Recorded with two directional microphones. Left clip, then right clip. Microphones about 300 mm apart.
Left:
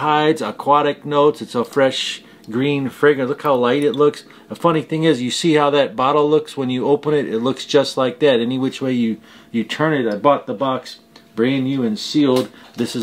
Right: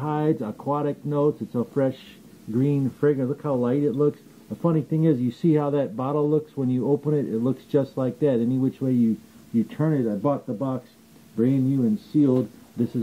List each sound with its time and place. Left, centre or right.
0.0 s speech: centre
1.2 s speech: left
1.8 s speech: centre